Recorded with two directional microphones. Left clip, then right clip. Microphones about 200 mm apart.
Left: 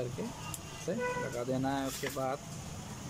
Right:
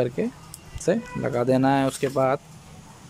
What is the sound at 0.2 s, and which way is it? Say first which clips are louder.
Speech: right 11 dB; 60° right (ahead or behind).